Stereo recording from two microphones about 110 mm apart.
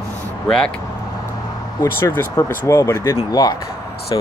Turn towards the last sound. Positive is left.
turn(degrees=45)  # may be behind; listen again after turning